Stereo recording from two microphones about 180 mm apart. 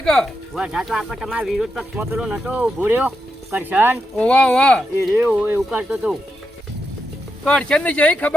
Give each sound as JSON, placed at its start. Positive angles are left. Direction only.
{"t": 0.0, "sound": "speech", "side_deg": 0}
{"t": 4.2, "sound": "speech", "side_deg": 5}
{"t": 5.1, "sound": "speech", "side_deg": -10}
{"t": 7.4, "sound": "speech", "side_deg": 5}